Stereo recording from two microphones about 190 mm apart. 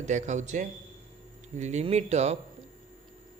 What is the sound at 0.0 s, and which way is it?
Speech, 40° right (ahead or behind).